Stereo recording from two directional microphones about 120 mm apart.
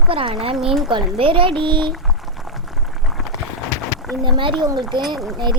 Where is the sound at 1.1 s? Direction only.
50° right (ahead or behind).